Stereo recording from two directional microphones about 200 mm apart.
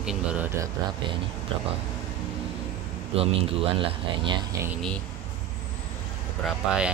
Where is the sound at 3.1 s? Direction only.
30° right (ahead or behind).